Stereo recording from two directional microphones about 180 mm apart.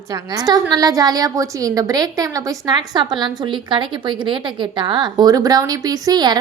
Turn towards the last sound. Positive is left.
turn(degrees=-25)  # may be behind; listen again after turning